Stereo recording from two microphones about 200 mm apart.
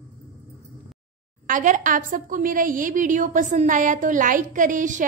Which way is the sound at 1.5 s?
40° right (ahead or behind).